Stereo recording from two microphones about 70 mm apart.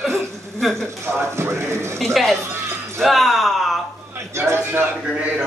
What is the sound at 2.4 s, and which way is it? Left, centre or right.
Music, right.